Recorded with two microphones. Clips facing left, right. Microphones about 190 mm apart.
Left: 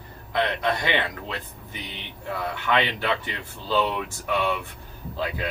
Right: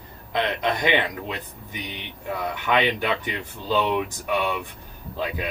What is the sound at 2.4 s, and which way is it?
Speech, 15° right (ahead or behind).